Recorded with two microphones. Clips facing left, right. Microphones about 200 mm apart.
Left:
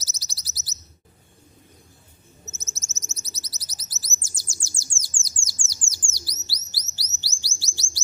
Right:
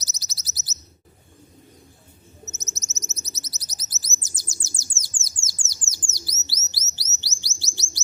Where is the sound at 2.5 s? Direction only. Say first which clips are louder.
Right 3 dB; 20° right (ahead or behind).